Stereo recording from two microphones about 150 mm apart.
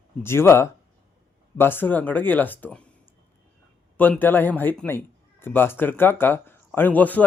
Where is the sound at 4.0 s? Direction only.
15° left (ahead or behind).